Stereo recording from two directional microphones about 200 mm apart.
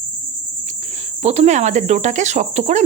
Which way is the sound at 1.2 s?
35° right (ahead or behind).